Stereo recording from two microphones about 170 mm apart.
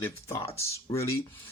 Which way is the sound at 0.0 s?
15° left (ahead or behind).